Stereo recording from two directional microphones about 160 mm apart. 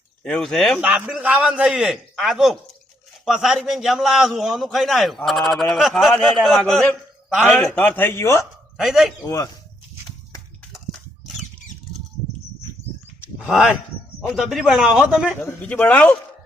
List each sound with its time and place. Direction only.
0.2 s a man's voice: 5° left (ahead or behind)
0.8 s a man's voice: 10° right (ahead or behind); by 8.4 s 15° left (ahead or behind)
8.8 s a man's voice: centre (ahead or behind)
9.2 s speech: 20° left (ahead or behind)
13.2 s a sound: 5° right (ahead or behind)
14.3 s a man's voice: centre (ahead or behind)
15.4 s a man's voice: 10° left (ahead or behind)